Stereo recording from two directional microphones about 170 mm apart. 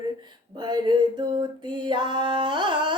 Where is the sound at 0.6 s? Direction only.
25° right (ahead or behind).